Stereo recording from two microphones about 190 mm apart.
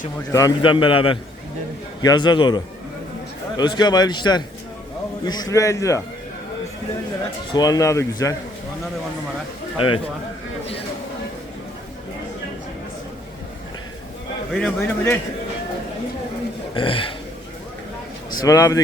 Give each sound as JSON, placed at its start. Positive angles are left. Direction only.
{"t": 0.3, "sound": "a man's voice", "side_deg": 20}
{"t": 3.6, "sound": "a man's voice", "side_deg": 20}
{"t": 7.5, "sound": "speech", "side_deg": 20}
{"t": 9.7, "sound": "a man's voice", "side_deg": 25}
{"t": 14.5, "sound": "speech", "side_deg": 5}
{"t": 16.7, "sound": "a man's voice", "side_deg": 30}
{"t": 18.4, "sound": "speech", "side_deg": 15}